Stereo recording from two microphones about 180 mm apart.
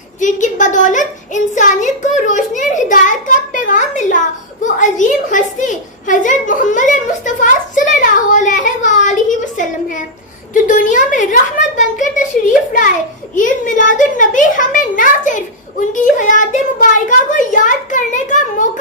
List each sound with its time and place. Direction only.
0.2 s a woman's voice: 45° left (ahead or behind)
7.9 s a sound: 45° left (ahead or behind)
13.3 s a woman's voice: 45° left (ahead or behind)